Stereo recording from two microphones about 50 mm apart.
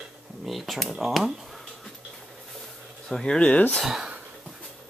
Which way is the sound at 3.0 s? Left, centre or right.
Centre.